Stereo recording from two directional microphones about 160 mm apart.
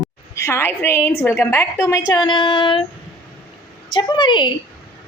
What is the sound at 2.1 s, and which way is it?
Female singing, 25° left (ahead or behind).